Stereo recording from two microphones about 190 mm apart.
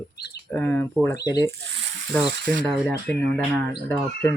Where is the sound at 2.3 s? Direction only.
65° right (ahead or behind).